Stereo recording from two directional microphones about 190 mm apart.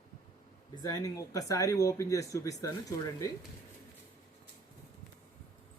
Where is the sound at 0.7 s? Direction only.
20° left (ahead or behind).